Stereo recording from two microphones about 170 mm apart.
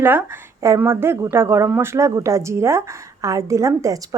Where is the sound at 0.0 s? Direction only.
15° right (ahead or behind).